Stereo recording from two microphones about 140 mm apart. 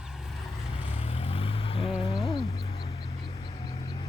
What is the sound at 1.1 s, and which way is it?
Vehicle, 45° left (ahead or behind).